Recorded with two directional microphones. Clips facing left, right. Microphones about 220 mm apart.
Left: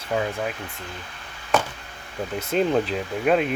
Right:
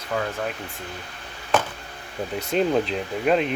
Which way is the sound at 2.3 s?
Centre (ahead or behind).